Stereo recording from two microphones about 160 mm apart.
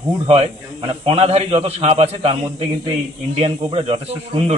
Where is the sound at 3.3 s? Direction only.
40° right (ahead or behind).